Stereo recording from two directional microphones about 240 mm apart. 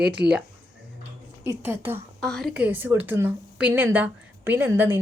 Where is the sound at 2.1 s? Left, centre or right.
Centre.